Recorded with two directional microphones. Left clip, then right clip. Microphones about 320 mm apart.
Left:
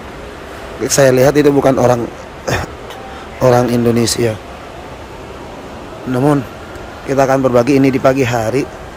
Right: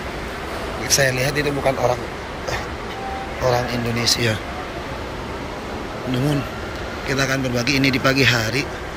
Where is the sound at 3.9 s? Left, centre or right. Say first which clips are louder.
Left 4 dB; centre.